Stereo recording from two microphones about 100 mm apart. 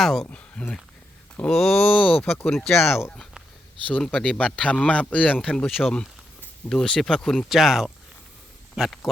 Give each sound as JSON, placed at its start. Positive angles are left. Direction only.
{"t": 0.0, "sound": "speech", "side_deg": 0}
{"t": 0.3, "sound": "speech", "side_deg": 15}
{"t": 1.9, "sound": "a man's voice", "side_deg": 15}
{"t": 2.4, "sound": "speech", "side_deg": 5}
{"t": 2.7, "sound": "speech", "side_deg": 25}
{"t": 3.8, "sound": "a man's voice", "side_deg": 10}